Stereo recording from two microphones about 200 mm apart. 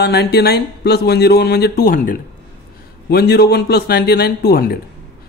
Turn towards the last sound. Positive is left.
turn(degrees=50)  # may be behind; listen again after turning